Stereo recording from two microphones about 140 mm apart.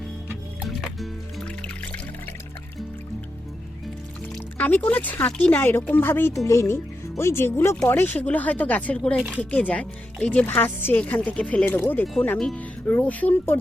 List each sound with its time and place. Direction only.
0.8 s music: centre (ahead or behind)
4.5 s speech: 10° left (ahead or behind)
12.4 s speech: 5° left (ahead or behind)